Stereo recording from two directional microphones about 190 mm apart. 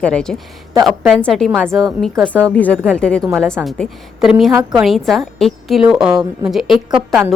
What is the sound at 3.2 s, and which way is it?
Speech, 15° right (ahead or behind).